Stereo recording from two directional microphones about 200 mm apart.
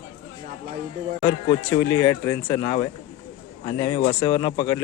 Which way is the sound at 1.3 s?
70° left (ahead or behind).